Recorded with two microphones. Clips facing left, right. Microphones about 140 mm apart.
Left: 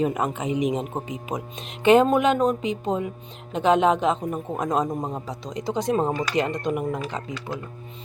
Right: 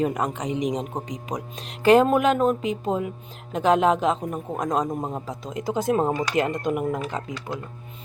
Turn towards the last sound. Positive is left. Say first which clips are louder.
# even
turn(degrees=0)  # may be behind; listen again after turning